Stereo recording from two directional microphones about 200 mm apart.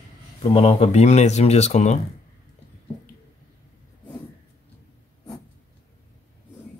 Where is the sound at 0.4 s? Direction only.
30° left (ahead or behind).